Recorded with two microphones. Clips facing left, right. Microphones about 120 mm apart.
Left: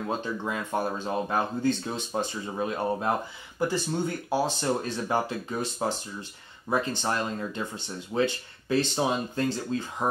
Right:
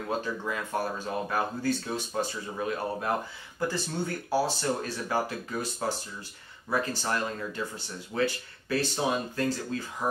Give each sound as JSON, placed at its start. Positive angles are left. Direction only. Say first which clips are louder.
{"t": 0.2, "sound": "speech", "louder": "left 2 dB", "side_deg": 20}